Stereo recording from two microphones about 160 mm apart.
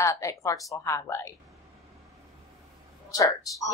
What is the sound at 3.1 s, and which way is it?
Speech, 20° left (ahead or behind).